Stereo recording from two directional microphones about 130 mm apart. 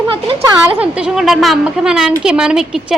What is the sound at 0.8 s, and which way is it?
A woman's voice, 5° right (ahead or behind).